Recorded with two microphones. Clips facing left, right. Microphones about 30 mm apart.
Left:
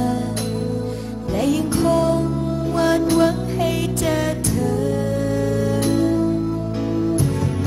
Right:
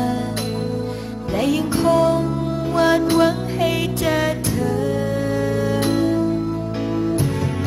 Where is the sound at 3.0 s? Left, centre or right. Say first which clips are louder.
Even; right.